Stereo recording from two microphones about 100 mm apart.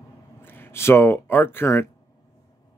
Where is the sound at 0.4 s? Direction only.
20° left (ahead or behind).